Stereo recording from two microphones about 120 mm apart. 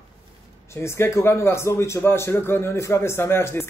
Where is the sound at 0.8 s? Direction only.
20° left (ahead or behind).